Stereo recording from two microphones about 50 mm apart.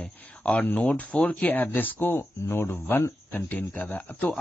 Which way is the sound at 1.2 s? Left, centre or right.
Left.